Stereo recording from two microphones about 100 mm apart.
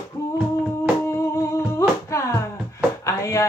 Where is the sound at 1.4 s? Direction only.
30° left (ahead or behind).